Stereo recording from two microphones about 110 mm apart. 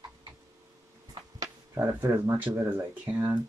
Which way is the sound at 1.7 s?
30° right (ahead or behind).